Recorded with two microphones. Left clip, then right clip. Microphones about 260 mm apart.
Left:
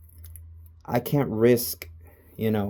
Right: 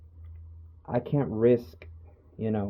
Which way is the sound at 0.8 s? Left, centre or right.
Left.